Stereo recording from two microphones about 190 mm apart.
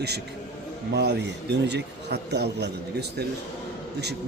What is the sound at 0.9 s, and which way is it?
A man's voice, 65° right (ahead or behind).